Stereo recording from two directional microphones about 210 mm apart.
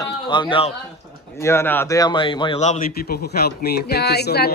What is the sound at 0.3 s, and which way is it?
Speech, 25° left (ahead or behind).